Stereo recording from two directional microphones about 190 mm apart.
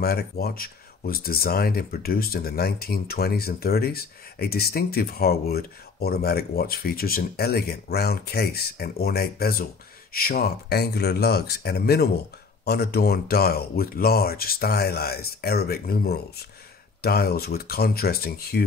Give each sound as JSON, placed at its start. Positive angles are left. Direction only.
{"t": 0.0, "sound": "speech", "side_deg": 55}